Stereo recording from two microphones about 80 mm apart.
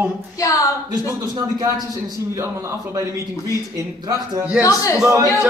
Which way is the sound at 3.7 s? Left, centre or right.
Right.